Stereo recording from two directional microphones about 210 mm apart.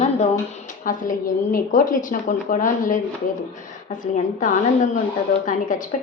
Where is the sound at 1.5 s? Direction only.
40° left (ahead or behind).